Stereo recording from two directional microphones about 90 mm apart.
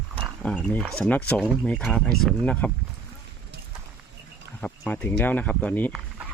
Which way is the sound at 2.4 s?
15° left (ahead or behind).